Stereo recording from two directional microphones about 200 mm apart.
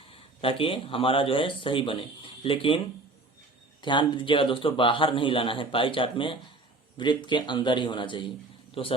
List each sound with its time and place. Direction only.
0.1 s speech: 30° left (ahead or behind)